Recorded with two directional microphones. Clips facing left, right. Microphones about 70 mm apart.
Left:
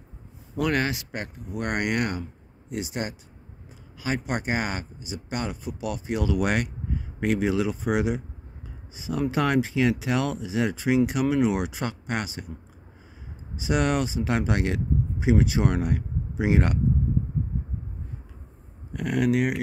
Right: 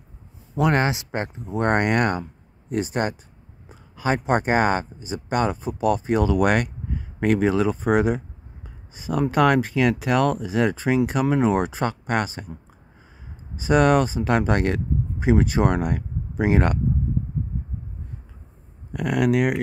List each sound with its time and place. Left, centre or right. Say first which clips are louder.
0.6 s speech: right 4 dB; right
13.6 s speech: right 7 dB; right
18.9 s speech: right 3 dB; right